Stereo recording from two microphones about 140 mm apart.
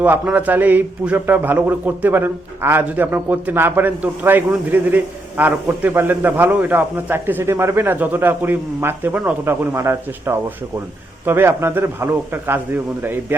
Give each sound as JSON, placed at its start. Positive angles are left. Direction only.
{"t": 0.0, "sound": "a man's voice", "side_deg": -10}